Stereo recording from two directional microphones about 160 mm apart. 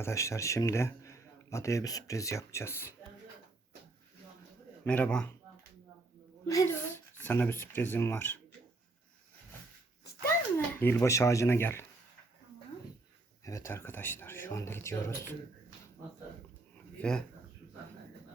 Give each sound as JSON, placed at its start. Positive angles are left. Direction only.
{"t": 0.0, "sound": "a man's voice", "side_deg": 20}
{"t": 4.9, "sound": "speech", "side_deg": 5}
{"t": 6.4, "sound": "a man's voice", "side_deg": 20}
{"t": 10.8, "sound": "speech", "side_deg": 15}
{"t": 13.4, "sound": "speech", "side_deg": 20}
{"t": 17.0, "sound": "speech", "side_deg": 5}